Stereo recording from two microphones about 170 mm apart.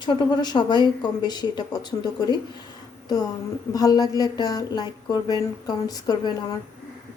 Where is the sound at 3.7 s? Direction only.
20° left (ahead or behind).